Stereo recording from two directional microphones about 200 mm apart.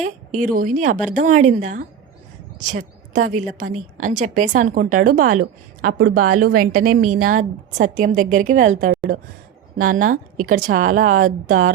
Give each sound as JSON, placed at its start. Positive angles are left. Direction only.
{"t": 0.0, "sound": "a woman's voice", "side_deg": -40}